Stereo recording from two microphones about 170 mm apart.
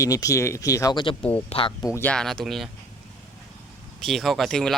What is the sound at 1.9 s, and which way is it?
Speech, 10° left (ahead or behind).